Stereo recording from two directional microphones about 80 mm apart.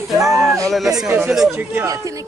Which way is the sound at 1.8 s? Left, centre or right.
Right.